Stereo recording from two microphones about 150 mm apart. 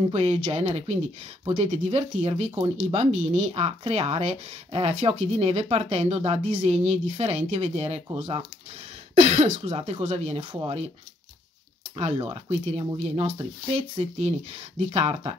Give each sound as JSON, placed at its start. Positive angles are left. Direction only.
{"t": 0.1, "sound": "speech", "side_deg": -45}
{"t": 12.0, "sound": "speech", "side_deg": -40}